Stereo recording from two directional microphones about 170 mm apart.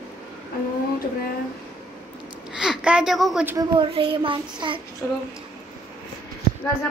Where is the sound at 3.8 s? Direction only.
30° right (ahead or behind).